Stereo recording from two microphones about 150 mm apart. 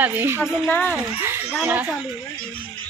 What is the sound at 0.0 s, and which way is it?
Speech, 10° right (ahead or behind).